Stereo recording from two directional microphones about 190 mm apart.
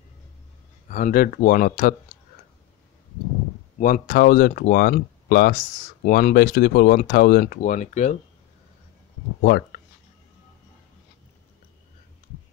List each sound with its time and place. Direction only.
0.8 s speech: 45° left (ahead or behind)
3.8 s speech: 50° left (ahead or behind)
9.4 s speech: 50° left (ahead or behind)